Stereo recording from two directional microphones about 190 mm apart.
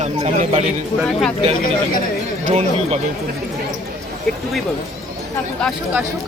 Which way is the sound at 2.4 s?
35° right (ahead or behind).